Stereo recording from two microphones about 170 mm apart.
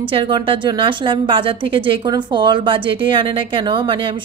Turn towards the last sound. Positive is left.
turn(degrees=-30)  # may be behind; listen again after turning